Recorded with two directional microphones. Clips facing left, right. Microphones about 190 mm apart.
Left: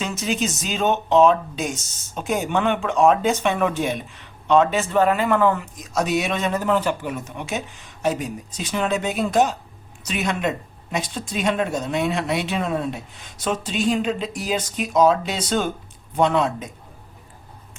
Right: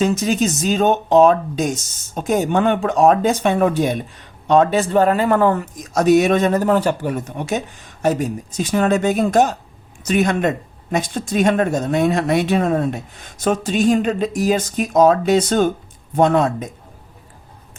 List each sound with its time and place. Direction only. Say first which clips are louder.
0.0 s speech: right 7 dB; 40° right (ahead or behind)